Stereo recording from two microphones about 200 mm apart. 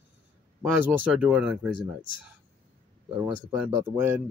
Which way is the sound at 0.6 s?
10° right (ahead or behind).